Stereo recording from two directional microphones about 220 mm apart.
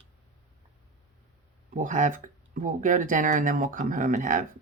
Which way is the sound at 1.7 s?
35° right (ahead or behind).